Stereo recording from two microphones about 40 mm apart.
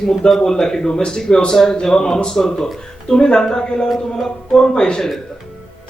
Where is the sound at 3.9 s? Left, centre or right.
Centre.